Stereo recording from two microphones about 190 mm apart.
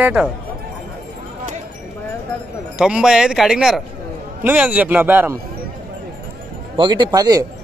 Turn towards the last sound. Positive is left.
turn(degrees=-20)  # may be behind; listen again after turning